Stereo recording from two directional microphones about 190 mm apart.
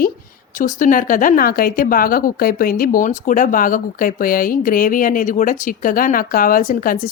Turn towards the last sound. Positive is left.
turn(degrees=45)  # may be behind; listen again after turning